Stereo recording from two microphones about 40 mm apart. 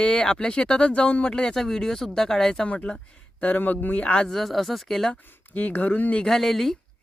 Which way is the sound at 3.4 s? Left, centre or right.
Left.